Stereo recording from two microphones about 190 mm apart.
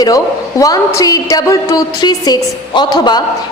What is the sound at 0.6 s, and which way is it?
A woman's voice, 20° left (ahead or behind).